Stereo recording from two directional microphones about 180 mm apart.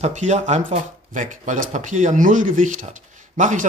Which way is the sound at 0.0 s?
40° right (ahead or behind).